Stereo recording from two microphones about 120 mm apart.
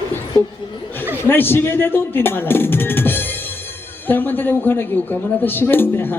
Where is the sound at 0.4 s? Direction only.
15° left (ahead or behind).